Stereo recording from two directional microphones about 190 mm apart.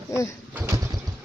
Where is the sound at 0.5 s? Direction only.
15° right (ahead or behind).